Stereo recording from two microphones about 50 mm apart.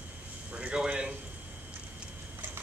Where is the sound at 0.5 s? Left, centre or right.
Right.